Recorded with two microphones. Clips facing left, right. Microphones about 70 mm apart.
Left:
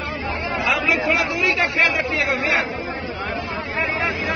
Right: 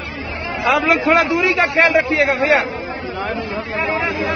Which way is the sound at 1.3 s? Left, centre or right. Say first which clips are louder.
Right 5 dB; right.